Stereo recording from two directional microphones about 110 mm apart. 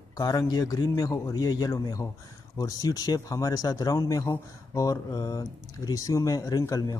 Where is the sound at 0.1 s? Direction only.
35° left (ahead or behind).